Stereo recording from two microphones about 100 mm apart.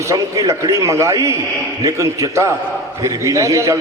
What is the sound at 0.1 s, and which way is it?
A man's voice, 30° right (ahead or behind).